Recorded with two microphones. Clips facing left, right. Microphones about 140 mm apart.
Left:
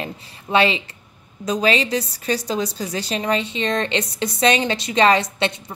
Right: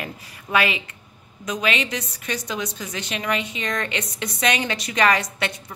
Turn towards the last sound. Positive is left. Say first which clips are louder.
# left 5 dB
turn(degrees=25)  # may be behind; listen again after turning